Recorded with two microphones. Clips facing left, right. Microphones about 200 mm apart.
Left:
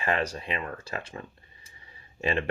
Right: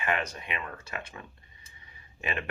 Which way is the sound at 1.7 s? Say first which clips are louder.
Left 8 dB; 30° left (ahead or behind).